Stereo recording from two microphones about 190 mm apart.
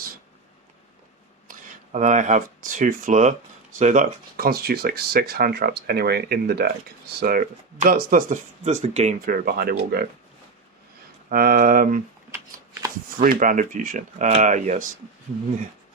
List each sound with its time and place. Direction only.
1.5 s speech: 40° right (ahead or behind)
11.3 s speech: 50° right (ahead or behind)
13.2 s speech: 45° right (ahead or behind)